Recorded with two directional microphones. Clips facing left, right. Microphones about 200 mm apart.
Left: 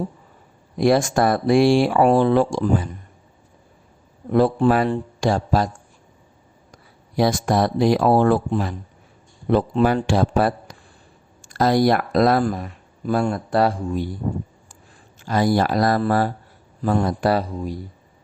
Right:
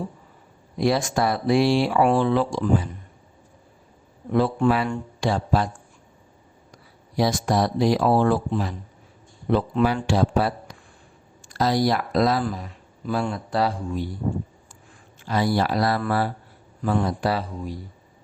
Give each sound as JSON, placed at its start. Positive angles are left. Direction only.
{"t": 0.8, "sound": "speech", "side_deg": 50}
{"t": 4.3, "sound": "a man's voice", "side_deg": 40}
{"t": 7.2, "sound": "speech", "side_deg": 55}
{"t": 9.8, "sound": "speech", "side_deg": 50}
{"t": 15.2, "sound": "speech", "side_deg": 45}